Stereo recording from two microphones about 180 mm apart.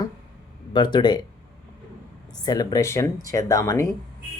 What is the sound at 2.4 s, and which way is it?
Speech, 20° left (ahead or behind).